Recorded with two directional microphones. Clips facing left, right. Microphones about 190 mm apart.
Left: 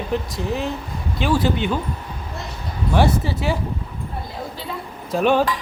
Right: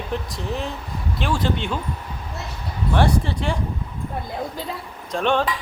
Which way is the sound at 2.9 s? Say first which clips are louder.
Left 2 dB; 5° left (ahead or behind).